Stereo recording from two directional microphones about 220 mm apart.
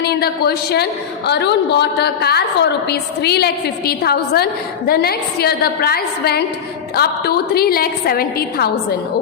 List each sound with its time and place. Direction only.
0.0 s a woman's voice: 45° left (ahead or behind)